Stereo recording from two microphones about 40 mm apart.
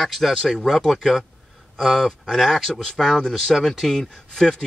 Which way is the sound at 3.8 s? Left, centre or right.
Centre.